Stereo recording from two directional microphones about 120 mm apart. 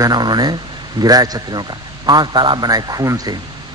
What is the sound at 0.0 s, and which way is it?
A man's voice, 35° right (ahead or behind).